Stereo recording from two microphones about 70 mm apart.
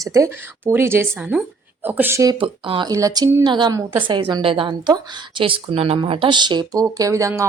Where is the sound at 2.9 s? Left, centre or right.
Right.